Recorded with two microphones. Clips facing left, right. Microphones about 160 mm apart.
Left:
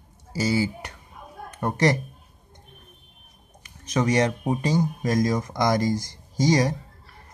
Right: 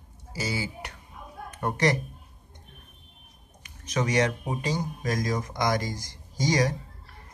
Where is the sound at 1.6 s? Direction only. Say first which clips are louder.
Left 3 dB; 35° left (ahead or behind).